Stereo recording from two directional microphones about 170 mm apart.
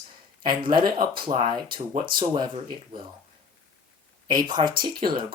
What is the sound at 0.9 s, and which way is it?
Speech, 30° right (ahead or behind).